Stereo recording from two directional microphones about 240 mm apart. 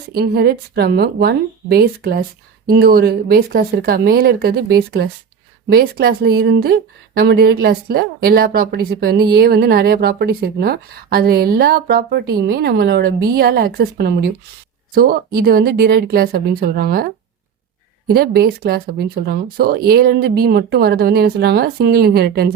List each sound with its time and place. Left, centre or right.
0.1 s speech: right
15.4 s speech: right
18.1 s speech: right